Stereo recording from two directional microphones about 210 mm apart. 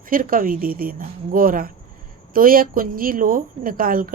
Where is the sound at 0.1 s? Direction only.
40° right (ahead or behind).